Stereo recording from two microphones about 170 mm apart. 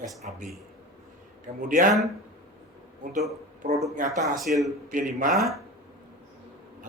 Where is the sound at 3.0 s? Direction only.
45° right (ahead or behind).